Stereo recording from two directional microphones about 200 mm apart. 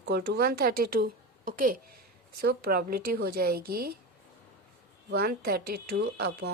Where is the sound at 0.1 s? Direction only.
55° right (ahead or behind).